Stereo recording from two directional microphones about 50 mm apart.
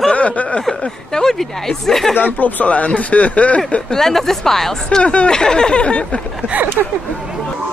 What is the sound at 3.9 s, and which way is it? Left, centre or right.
Speech, centre.